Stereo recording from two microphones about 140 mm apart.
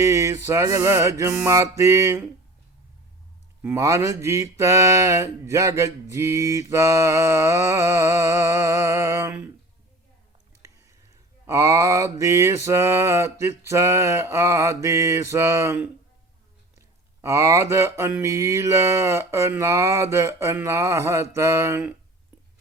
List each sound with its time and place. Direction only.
0.0 s a sound: 20° right (ahead or behind)
0.4 s mantra: 20° right (ahead or behind)
3.6 s mantra: 20° right (ahead or behind)
11.4 s mantra: 20° right (ahead or behind)